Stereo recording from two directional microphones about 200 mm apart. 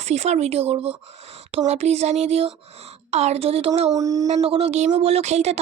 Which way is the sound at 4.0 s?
15° right (ahead or behind).